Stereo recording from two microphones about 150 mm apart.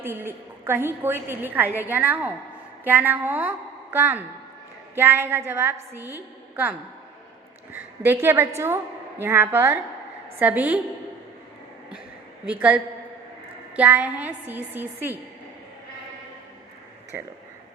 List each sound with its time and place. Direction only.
0.0 s a woman's voice: 15° right (ahead or behind)
12.5 s a woman's voice: 10° right (ahead or behind)